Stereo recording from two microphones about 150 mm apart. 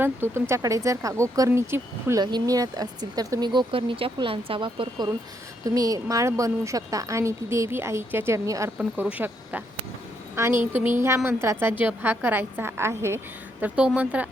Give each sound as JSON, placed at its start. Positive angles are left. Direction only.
{"t": 0.0, "sound": "a woman's voice", "side_deg": -15}